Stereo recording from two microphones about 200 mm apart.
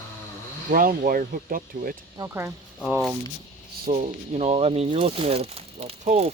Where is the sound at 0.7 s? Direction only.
45° right (ahead or behind).